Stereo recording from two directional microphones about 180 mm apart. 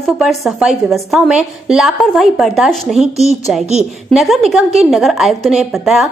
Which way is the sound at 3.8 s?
Centre (ahead or behind).